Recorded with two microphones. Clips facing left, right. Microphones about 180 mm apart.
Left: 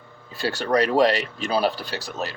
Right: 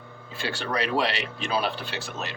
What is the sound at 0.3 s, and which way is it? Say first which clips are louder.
Speech: left 7 dB; 40° left (ahead or behind).